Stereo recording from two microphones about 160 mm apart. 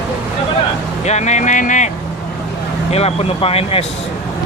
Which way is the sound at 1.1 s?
45° left (ahead or behind).